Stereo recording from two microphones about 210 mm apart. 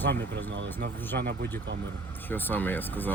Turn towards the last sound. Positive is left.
turn(degrees=10)  # may be behind; listen again after turning